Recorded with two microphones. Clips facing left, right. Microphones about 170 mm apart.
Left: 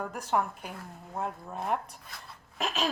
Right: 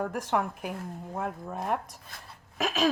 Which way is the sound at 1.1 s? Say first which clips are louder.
Right 1 dB; 45° right (ahead or behind).